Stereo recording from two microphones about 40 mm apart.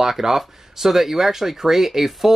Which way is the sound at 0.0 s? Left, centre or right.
Centre.